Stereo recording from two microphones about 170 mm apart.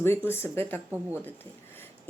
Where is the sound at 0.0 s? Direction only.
15° left (ahead or behind).